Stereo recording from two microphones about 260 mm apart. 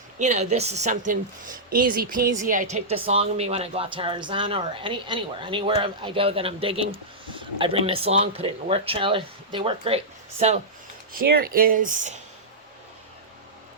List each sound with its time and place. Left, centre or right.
0.2 s a woman's voice: right
2.2 s speech: centre
2.5 s a woman's voice: right